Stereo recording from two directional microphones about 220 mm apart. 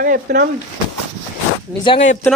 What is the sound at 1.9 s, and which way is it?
Speech, 20° left (ahead or behind).